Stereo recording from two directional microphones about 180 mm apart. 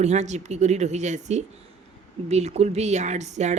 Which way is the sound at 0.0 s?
40° right (ahead or behind).